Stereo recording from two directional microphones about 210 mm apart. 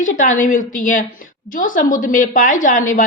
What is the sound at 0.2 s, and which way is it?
A woman's voice, 35° left (ahead or behind).